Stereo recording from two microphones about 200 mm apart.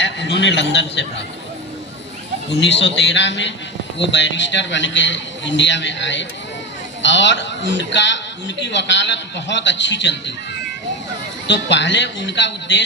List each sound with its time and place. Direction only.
0.0 s a man's voice: 65° left (ahead or behind)
2.6 s a man's voice: 65° left (ahead or behind)
11.4 s a man's voice: 60° left (ahead or behind)